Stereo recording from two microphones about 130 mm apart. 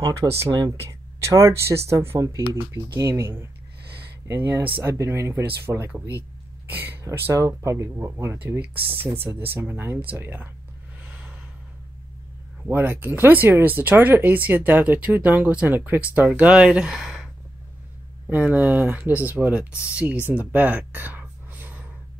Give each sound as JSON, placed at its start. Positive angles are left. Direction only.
{"t": 0.0, "sound": "speech", "side_deg": -25}
{"t": 11.1, "sound": "vehicle", "side_deg": -10}
{"t": 12.6, "sound": "speech", "side_deg": -15}
{"t": 20.2, "sound": "a sound", "side_deg": -15}